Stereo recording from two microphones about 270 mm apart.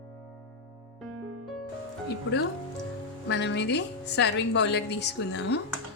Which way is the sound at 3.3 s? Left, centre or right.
Left.